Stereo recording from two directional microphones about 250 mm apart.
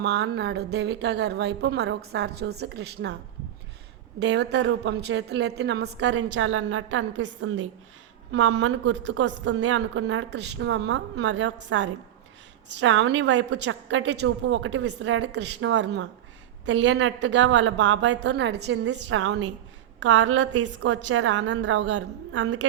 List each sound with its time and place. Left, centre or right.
0.0 s a woman's voice: right
4.2 s a woman's voice: right
20.7 s a woman's voice: right